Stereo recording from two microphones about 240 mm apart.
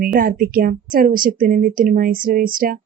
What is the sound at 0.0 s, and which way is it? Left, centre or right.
Speech, right.